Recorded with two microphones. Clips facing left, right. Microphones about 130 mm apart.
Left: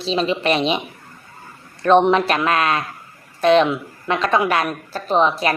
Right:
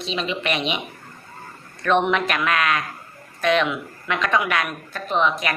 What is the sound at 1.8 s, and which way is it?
A woman's voice, 35° left (ahead or behind).